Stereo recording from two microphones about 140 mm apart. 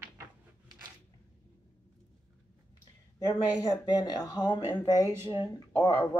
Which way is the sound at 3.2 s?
30° left (ahead or behind).